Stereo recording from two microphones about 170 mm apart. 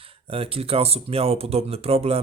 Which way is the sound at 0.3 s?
35° right (ahead or behind).